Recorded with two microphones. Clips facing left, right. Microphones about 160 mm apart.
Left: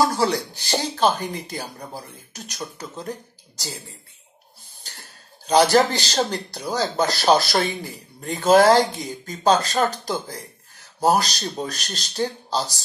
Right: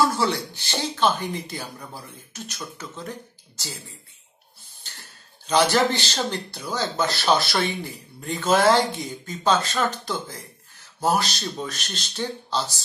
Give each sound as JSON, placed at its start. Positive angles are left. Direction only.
{"t": 0.0, "sound": "speech", "side_deg": 40}
{"t": 4.9, "sound": "cough", "side_deg": 40}
{"t": 5.5, "sound": "speech", "side_deg": 40}